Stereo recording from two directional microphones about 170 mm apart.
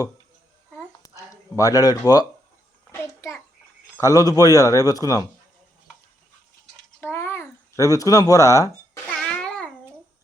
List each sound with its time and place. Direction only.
0.8 s a sound: 20° left (ahead or behind)
2.9 s child singing: 15° left (ahead or behind)
3.9 s a man's voice: 20° left (ahead or behind)
7.0 s babbling: 15° left (ahead or behind)
9.0 s music: 5° left (ahead or behind)